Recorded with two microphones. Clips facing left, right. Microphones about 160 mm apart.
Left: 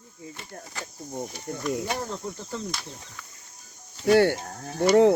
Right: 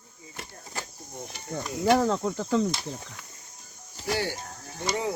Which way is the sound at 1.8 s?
90° right.